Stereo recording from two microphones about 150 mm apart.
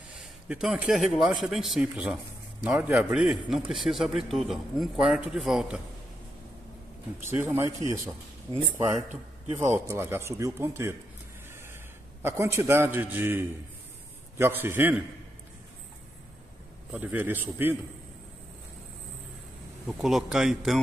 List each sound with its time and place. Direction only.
0.5 s a man's voice: 5° right (ahead or behind)
7.2 s speech: 15° right (ahead or behind)
9.6 s speech: 15° right (ahead or behind)
12.2 s speech: 15° right (ahead or behind)
16.9 s speech: 10° right (ahead or behind)
19.9 s a man's voice: centre (ahead or behind)